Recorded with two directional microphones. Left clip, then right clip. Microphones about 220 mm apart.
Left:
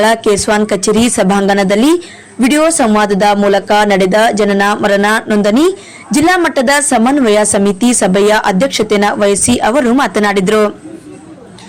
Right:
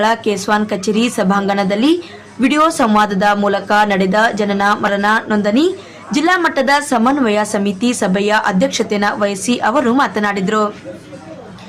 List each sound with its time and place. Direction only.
0.0 s a woman's voice: 30° left (ahead or behind)